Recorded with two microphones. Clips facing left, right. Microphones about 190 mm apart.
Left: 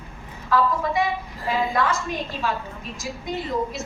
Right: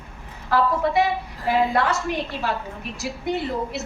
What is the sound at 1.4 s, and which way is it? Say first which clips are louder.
A woman's voice: right 3 dB; 65° right (ahead or behind).